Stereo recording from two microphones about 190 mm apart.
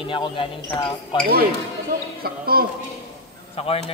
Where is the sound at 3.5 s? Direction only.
30° left (ahead or behind).